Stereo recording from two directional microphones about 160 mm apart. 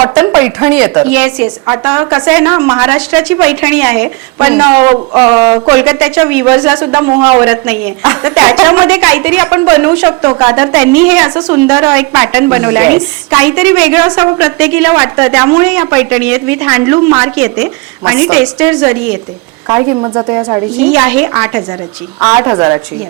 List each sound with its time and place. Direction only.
0.3 s speech: 15° right (ahead or behind)